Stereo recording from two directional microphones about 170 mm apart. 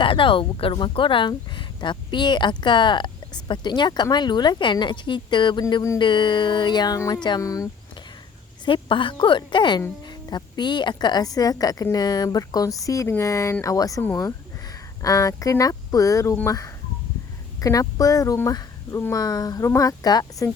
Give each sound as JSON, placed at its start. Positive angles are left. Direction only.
{"t": 0.0, "sound": "speech", "side_deg": 30}